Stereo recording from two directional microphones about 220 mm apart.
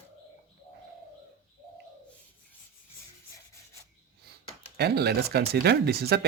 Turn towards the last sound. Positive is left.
turn(degrees=-45)  # may be behind; listen again after turning